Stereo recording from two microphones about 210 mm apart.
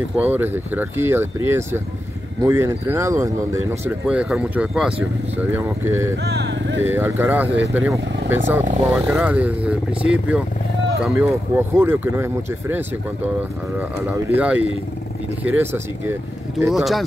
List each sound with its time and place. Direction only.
0.2 s speech: 10° right (ahead or behind)
6.2 s vehicle: 55° right (ahead or behind)
6.8 s speech: 10° right (ahead or behind)